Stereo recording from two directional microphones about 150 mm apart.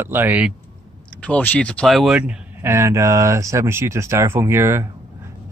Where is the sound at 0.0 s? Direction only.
15° right (ahead or behind).